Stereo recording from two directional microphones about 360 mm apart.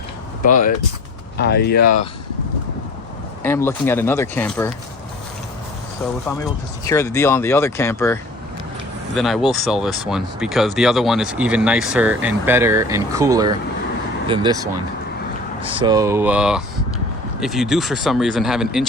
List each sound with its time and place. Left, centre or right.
0.4 s speech: left
1.8 s speech: left
3.4 s speech: centre
6.2 s speech: centre
15.6 s speech: centre